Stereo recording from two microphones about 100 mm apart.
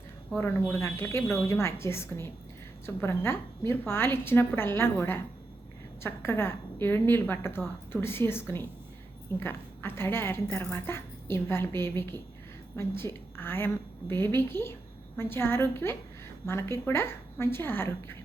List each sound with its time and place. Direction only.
0.3 s a woman's voice: 25° left (ahead or behind)